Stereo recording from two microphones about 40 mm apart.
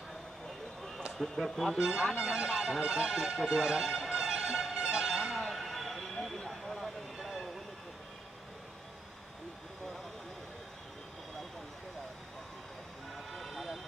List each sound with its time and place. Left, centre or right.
1.1 s speech: centre
1.8 s speech: centre
4.1 s music: centre
5.4 s vehicle: centre
7.2 s train: centre
13.1 s a sound: centre